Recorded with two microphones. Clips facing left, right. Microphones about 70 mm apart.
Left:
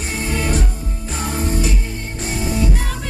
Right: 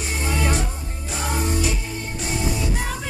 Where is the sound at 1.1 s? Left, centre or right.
Left.